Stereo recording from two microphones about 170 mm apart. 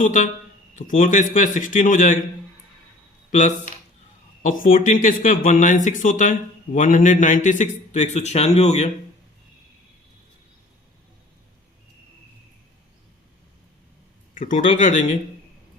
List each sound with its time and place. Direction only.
0.0 s speech: 50° left (ahead or behind)
3.3 s speech: 45° left (ahead or behind)
14.3 s speech: 50° left (ahead or behind)